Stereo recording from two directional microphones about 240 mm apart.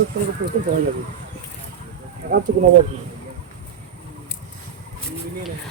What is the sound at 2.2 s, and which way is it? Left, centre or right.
Speech, right.